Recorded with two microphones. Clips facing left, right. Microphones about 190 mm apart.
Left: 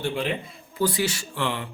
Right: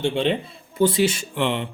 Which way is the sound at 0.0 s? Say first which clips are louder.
Right 5 dB; 30° right (ahead or behind).